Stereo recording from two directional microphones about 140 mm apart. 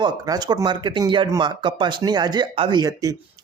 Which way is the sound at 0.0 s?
30° right (ahead or behind).